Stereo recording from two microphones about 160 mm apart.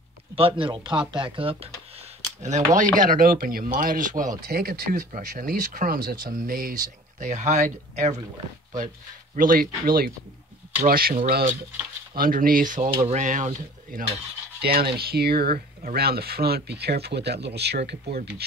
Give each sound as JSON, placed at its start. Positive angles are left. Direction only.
{"t": 0.4, "sound": "speech", "side_deg": -35}
{"t": 2.4, "sound": "speech", "side_deg": -50}
{"t": 3.0, "sound": "speech", "side_deg": -60}
{"t": 4.5, "sound": "speech", "side_deg": -70}
{"t": 7.2, "sound": "speech", "side_deg": -50}
{"t": 14.6, "sound": "speech", "side_deg": -75}